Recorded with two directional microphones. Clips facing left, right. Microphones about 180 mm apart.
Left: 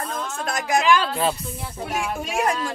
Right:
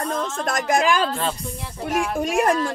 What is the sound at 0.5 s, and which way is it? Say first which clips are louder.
Speech: left 1 dB; 50° right (ahead or behind).